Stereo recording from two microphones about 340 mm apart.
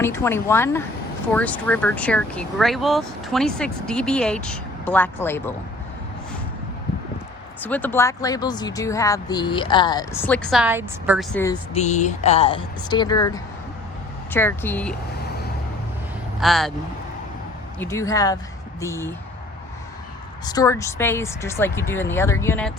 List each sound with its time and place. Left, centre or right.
0.0 s speech: centre
7.6 s speech: centre
11.7 s speech: centre
16.4 s speech: centre
17.7 s speech: centre
20.4 s speech: centre